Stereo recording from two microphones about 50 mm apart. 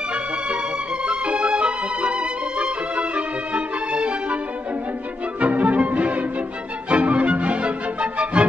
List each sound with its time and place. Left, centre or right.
1.0 s music: right
5.4 s music: right